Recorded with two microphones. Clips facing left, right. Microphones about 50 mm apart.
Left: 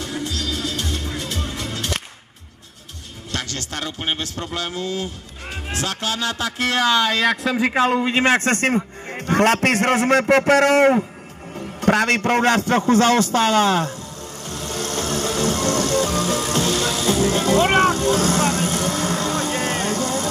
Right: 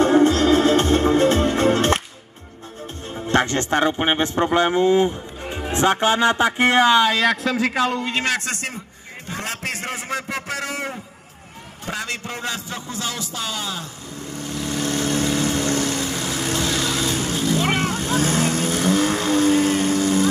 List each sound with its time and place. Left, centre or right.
0.0 s music: right
3.3 s a man's voice: right
7.1 s speech: centre
7.7 s a man's voice: left
8.5 s speech: left
9.3 s a man's voice: left
14.4 s vehicle: left